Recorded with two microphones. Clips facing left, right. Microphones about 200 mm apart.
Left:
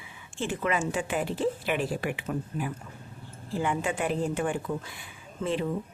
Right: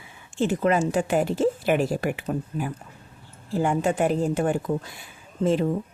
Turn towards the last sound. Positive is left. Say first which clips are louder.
# right 7 dB
turn(degrees=-45)  # may be behind; listen again after turning